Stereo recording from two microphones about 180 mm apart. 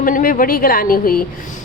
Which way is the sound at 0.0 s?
50° left (ahead or behind).